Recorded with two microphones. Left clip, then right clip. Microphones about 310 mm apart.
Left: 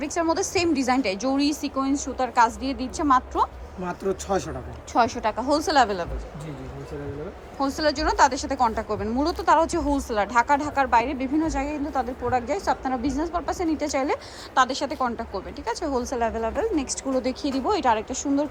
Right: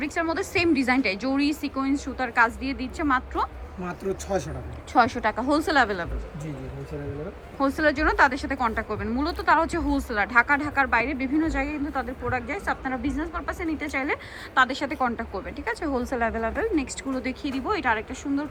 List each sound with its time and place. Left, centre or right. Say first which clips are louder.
0.0 s a woman's voice: left 2 dB; centre
7.8 s a woman's voice: left 1 dB; centre
9.8 s speech: left 2 dB; left
10.1 s a woman's voice: even; centre